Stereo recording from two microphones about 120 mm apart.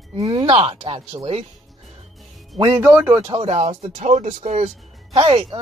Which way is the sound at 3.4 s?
60° right (ahead or behind).